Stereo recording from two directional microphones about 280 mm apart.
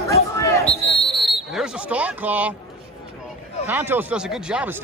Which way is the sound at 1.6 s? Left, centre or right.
Centre.